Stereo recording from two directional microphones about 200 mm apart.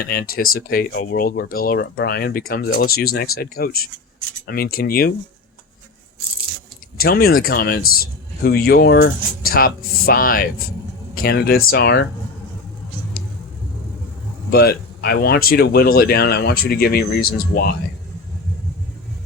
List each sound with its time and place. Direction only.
0.0 s speech: 50° left (ahead or behind)
7.0 s speech: 50° left (ahead or behind)
14.5 s speech: 50° left (ahead or behind)